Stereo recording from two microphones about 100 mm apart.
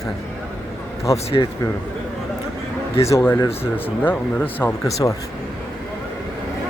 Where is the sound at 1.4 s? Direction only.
40° left (ahead or behind).